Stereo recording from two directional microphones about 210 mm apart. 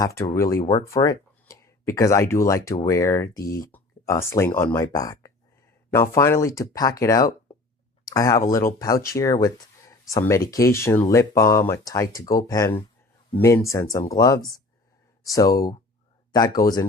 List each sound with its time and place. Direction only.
0.0 s speech: 15° left (ahead or behind)